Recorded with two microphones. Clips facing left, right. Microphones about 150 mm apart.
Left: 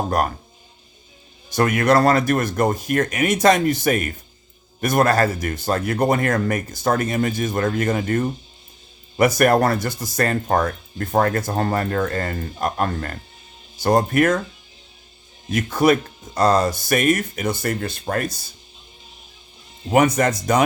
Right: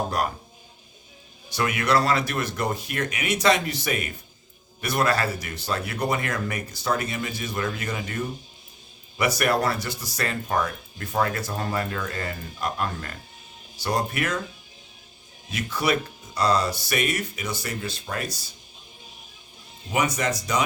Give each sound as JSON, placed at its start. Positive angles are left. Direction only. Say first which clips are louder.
{"t": 1.5, "sound": "speech", "louder": "left 7 dB", "side_deg": 50}
{"t": 15.4, "sound": "speech", "louder": "left 8 dB", "side_deg": 50}
{"t": 19.9, "sound": "speech", "louder": "left 8 dB", "side_deg": 55}